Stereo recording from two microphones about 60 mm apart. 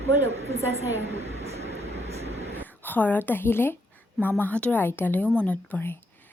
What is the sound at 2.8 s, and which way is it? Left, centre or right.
A woman's voice, left.